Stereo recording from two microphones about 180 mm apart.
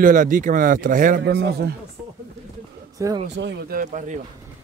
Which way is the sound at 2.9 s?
20° right (ahead or behind).